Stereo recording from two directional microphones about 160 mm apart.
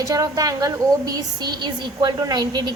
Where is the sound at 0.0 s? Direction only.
20° right (ahead or behind).